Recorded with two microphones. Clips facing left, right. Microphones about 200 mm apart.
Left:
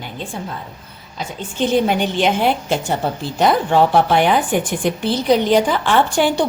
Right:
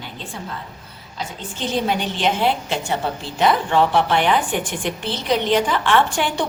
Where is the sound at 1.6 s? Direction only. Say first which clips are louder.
Left 6 dB; 50° left (ahead or behind); by 6.4 s 35° left (ahead or behind).